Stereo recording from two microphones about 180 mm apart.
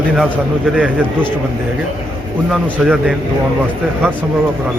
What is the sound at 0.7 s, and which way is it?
Speech, 5° right (ahead or behind).